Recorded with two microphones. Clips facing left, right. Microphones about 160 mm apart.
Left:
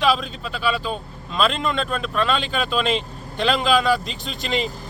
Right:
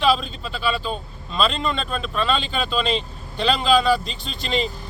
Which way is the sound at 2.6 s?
15° left (ahead or behind).